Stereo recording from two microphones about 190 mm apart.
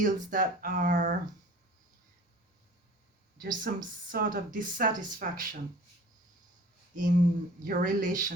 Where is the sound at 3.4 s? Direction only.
45° right (ahead or behind).